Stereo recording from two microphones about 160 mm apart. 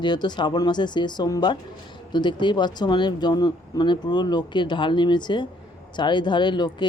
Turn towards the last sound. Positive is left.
turn(degrees=30)  # may be behind; listen again after turning